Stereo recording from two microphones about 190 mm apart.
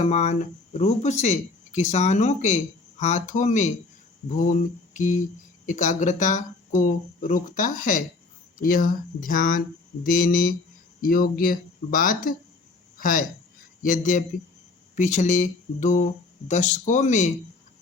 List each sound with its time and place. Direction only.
0.0 s speech: 35° left (ahead or behind)
4.4 s mantra: 40° left (ahead or behind)
5.6 s speech: 40° left (ahead or behind)